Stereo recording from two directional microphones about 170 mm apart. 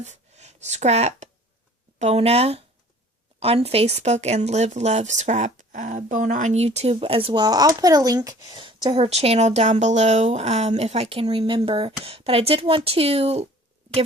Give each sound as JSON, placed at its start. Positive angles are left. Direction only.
{"t": 0.0, "sound": "speech", "side_deg": -40}